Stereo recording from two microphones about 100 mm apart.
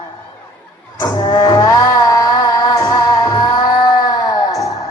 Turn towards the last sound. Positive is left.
turn(degrees=40)  # may be behind; listen again after turning